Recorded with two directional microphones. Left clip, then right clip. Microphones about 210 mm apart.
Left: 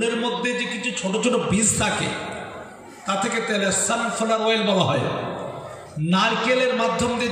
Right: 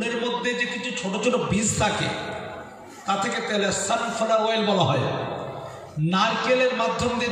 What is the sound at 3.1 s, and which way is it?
A man's voice, 30° left (ahead or behind).